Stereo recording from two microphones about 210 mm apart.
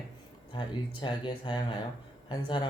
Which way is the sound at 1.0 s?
20° left (ahead or behind).